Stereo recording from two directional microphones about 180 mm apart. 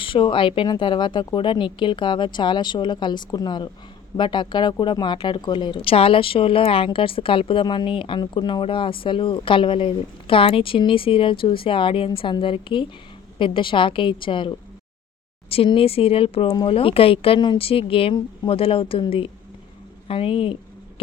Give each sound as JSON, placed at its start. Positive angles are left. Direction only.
{"t": 0.0, "sound": "speech", "side_deg": 30}